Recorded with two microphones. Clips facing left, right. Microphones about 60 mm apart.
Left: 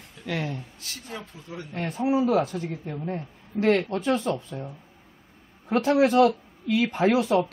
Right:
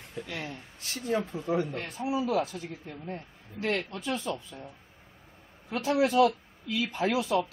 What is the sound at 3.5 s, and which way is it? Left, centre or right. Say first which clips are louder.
Speech: left 9 dB; left.